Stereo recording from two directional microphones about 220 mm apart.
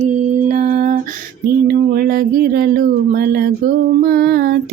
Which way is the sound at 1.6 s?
40° right (ahead or behind).